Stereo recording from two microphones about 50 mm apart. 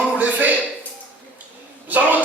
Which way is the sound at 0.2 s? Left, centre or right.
Right.